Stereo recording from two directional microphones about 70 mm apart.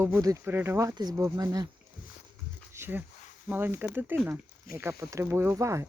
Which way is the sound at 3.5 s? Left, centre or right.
Right.